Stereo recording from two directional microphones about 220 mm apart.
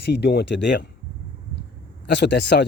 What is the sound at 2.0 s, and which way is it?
Speech, 50° left (ahead or behind).